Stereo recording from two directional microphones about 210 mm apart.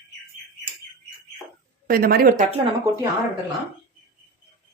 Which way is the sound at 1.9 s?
45° right (ahead or behind).